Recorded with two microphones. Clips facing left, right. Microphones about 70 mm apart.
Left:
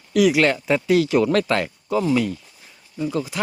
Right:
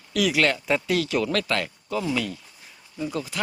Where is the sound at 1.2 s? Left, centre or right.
Left.